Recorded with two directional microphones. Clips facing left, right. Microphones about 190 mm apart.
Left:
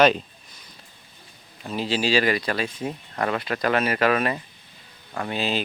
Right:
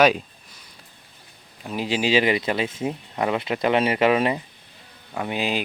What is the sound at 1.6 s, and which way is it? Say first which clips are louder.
Speech: right 1 dB; 10° right (ahead or behind).